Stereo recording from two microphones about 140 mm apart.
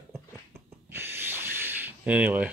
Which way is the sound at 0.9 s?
15° right (ahead or behind).